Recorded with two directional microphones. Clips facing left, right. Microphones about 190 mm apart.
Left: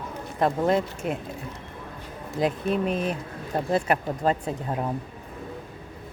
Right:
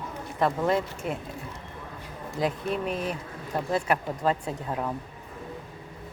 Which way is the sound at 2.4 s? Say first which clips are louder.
Left 4 dB; 20° left (ahead or behind).